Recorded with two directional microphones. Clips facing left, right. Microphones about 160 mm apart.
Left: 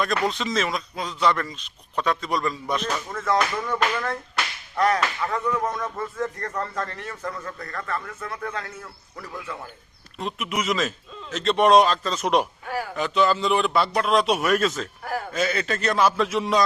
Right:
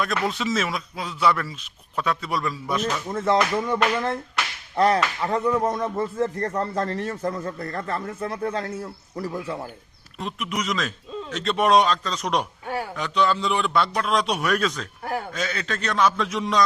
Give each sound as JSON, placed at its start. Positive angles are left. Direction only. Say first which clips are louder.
{"t": 0.3, "sound": "a man's voice", "louder": "even", "side_deg": -5}
{"t": 3.1, "sound": "speech", "louder": "right 3 dB", "side_deg": -25}
{"t": 10.2, "sound": "a man's voice", "louder": "left 1 dB", "side_deg": 0}
{"t": 12.6, "sound": "speech", "louder": "right 1 dB", "side_deg": -25}
{"t": 13.0, "sound": "a man's voice", "louder": "left 2 dB", "side_deg": 0}